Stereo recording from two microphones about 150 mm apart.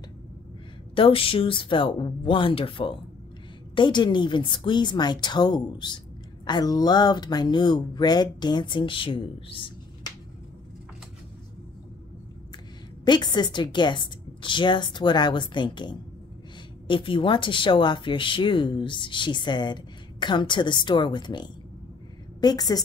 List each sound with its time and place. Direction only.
0.9 s speech: 40° left (ahead or behind)
13.0 s speech: 30° left (ahead or behind)